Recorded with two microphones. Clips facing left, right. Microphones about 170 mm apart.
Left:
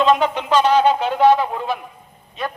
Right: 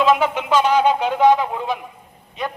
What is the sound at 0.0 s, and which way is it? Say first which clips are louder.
A man's voice: left 1 dB; 10° right (ahead or behind).